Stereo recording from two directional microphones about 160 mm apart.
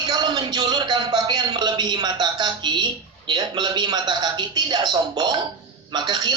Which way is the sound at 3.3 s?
25° right (ahead or behind).